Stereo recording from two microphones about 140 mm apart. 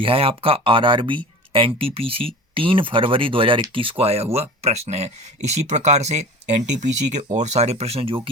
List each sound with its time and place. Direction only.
0.0 s speech: 40° right (ahead or behind)